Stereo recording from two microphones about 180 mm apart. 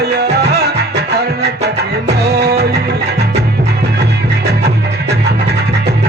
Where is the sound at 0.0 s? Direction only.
65° right (ahead or behind).